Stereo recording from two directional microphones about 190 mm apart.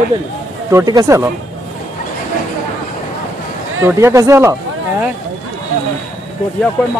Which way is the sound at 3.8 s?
15° right (ahead or behind).